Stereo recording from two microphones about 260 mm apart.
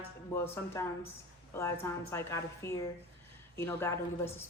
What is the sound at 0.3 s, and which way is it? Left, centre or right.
A woman's voice, centre.